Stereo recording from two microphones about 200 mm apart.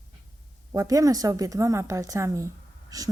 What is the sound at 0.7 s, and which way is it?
A woman's voice, 15° right (ahead or behind).